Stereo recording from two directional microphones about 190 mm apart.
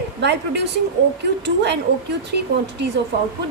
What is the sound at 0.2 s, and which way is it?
Speech, 65° right (ahead or behind).